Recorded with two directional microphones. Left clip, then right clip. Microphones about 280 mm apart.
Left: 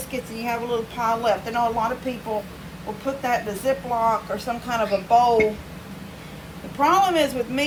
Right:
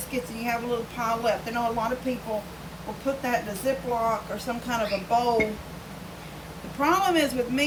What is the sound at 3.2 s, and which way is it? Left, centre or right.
Speech, centre.